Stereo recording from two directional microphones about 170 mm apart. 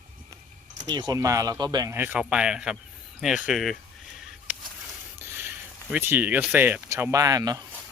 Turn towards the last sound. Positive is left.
turn(degrees=-20)  # may be behind; listen again after turning